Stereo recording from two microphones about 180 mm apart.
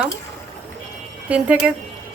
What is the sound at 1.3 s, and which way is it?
Speech, 5° right (ahead or behind).